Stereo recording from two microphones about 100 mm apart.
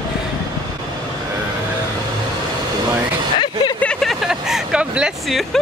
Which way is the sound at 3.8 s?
5° left (ahead or behind).